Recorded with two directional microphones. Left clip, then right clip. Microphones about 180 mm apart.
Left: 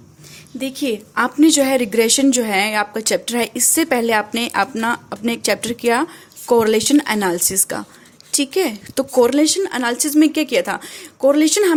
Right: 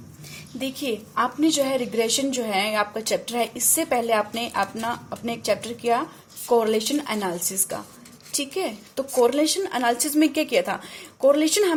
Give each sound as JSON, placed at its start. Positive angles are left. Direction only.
{"t": 0.6, "sound": "a woman's voice", "side_deg": 30}